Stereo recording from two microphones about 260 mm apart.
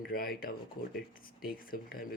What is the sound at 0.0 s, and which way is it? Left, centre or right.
A man's voice, left.